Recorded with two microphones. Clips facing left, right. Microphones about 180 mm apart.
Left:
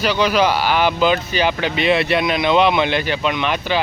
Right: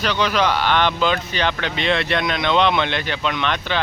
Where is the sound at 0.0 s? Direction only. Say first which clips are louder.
Left 3 dB; 5° left (ahead or behind).